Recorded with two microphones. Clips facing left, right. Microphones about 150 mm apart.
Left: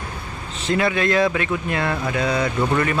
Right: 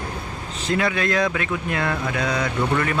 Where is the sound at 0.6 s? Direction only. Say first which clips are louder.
Left 2 dB; centre (ahead or behind).